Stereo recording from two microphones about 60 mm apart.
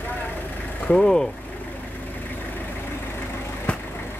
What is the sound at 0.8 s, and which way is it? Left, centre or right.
Speech, centre.